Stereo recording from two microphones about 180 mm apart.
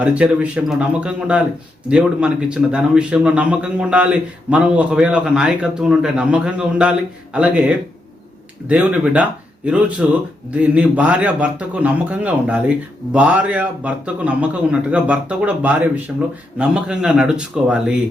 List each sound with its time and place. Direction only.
0.0 s a man's voice: 5° right (ahead or behind)